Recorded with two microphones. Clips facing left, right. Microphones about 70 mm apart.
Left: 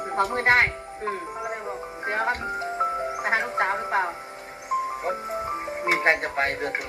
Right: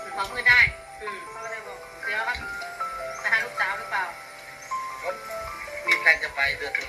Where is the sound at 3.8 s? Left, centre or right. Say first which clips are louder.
Left 4 dB; left.